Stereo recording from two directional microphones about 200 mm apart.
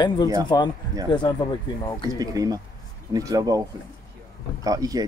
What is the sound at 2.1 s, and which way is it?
Speech, 15° right (ahead or behind).